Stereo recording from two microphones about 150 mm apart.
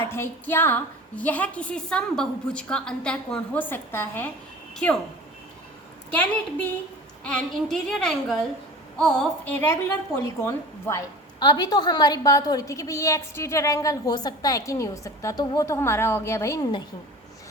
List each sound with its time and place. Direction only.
0.1 s a woman's voice: 15° left (ahead or behind)
6.1 s a woman's voice: 10° left (ahead or behind)
11.4 s a woman's voice: 30° left (ahead or behind)